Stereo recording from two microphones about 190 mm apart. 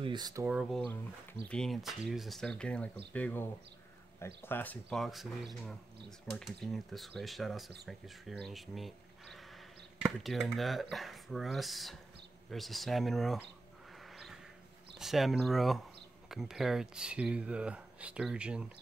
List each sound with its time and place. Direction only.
0.0 s speech: 20° right (ahead or behind)
0.5 s speech: centre (ahead or behind)
14.1 s a sound: centre (ahead or behind)
15.0 s speech: centre (ahead or behind)